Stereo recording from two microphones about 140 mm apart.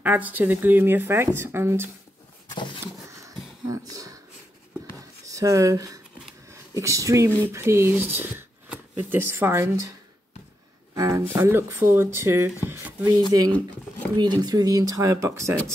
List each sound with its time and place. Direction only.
0.0 s speech: 10° right (ahead or behind)
2.5 s a sound: 35° left (ahead or behind)
3.6 s speech: 25° right (ahead or behind)
5.2 s speech: 25° right (ahead or behind)
11.0 s speech: 20° right (ahead or behind)
12.6 s a sound: 15° right (ahead or behind)
14.1 s speech: 30° right (ahead or behind)